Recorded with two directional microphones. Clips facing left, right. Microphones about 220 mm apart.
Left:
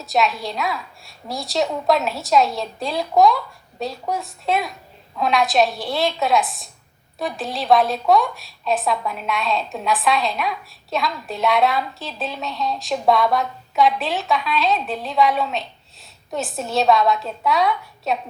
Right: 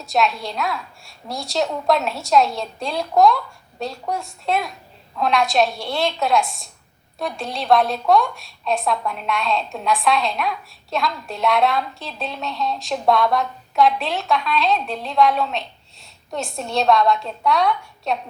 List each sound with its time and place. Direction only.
0.0 s a woman's voice: centre (ahead or behind)